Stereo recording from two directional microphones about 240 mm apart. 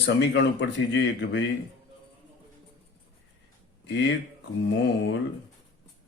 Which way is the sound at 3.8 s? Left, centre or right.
Left.